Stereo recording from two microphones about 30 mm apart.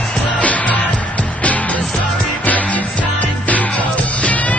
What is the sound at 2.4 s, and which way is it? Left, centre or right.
Music, left.